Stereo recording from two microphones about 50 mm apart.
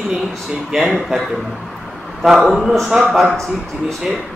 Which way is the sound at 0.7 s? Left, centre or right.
Centre.